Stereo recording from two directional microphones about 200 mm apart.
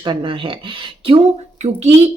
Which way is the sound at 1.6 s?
35° right (ahead or behind).